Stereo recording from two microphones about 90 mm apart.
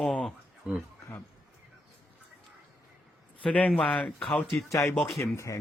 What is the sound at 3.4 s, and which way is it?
Speech, 15° left (ahead or behind).